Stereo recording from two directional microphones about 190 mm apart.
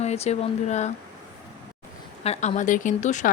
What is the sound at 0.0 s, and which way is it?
Speech, 35° left (ahead or behind).